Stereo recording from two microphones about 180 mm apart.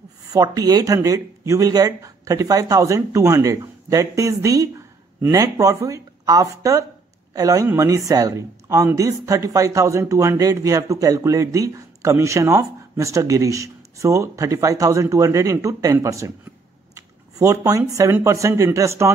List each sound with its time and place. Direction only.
0.3 s speech: 20° right (ahead or behind)